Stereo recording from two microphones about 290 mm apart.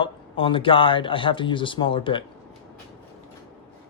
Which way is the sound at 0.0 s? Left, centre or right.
Centre.